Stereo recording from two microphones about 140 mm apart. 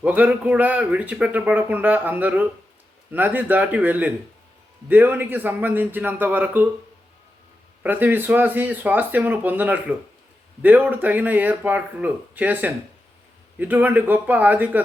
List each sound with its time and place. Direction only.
0.0 s a man's voice: 10° right (ahead or behind)
7.8 s a man's voice: 15° right (ahead or behind)